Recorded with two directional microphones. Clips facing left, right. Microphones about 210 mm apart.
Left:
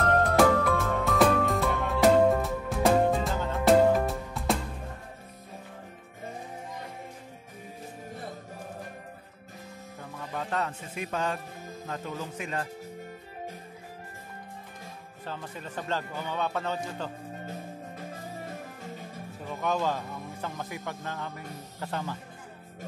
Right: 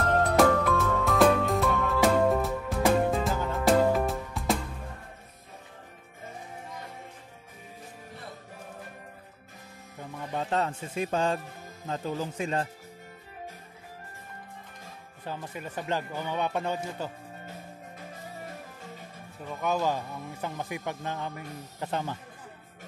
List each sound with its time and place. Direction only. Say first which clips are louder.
0.0 s music: even; centre (ahead or behind)
10.3 s speech: right 3 dB; 30° right (ahead or behind)
15.2 s speech: right 2 dB; 10° right (ahead or behind)
19.6 s speech: right 1 dB; 10° right (ahead or behind)